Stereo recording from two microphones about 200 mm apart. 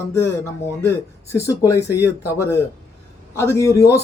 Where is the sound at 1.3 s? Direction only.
15° left (ahead or behind).